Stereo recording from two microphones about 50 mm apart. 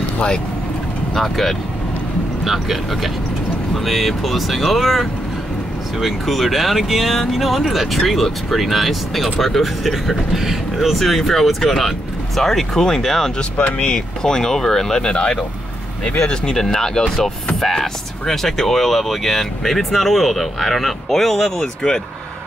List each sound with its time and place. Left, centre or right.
1.1 s speech: centre
13.4 s speech: left
13.8 s speech: centre